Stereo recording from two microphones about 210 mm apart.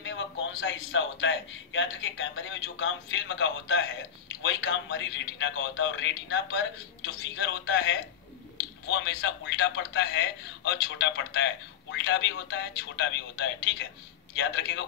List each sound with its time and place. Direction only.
0.0 s a man's voice: 60° left (ahead or behind)